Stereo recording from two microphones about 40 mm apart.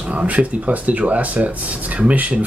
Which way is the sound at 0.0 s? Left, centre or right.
Right.